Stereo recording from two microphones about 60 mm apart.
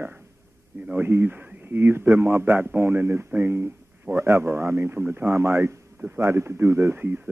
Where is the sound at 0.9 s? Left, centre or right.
Right.